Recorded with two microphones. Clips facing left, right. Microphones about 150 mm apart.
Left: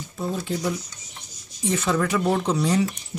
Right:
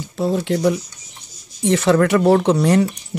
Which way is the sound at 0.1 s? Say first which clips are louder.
Right 8 dB; 80° right.